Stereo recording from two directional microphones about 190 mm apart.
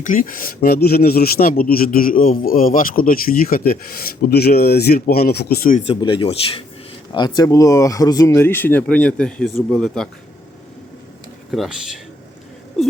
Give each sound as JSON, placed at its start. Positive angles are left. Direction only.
{"t": 0.0, "sound": "speech", "side_deg": 45}
{"t": 5.9, "sound": "speech", "side_deg": 25}
{"t": 11.5, "sound": "speech", "side_deg": 0}